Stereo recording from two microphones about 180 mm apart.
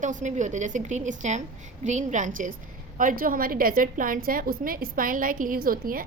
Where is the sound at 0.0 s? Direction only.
45° right (ahead or behind).